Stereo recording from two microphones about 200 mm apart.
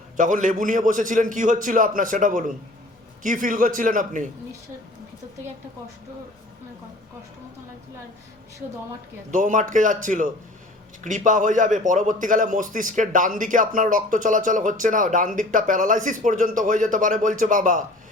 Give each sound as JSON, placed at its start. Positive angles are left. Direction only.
{"t": 0.2, "sound": "a man's voice", "side_deg": -40}
{"t": 9.3, "sound": "a man's voice", "side_deg": -40}